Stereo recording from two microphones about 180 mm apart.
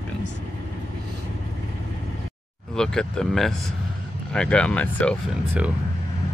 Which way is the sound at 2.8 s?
5° left (ahead or behind).